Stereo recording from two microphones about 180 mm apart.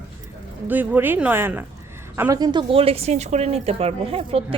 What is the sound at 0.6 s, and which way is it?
A woman's voice, 10° right (ahead or behind).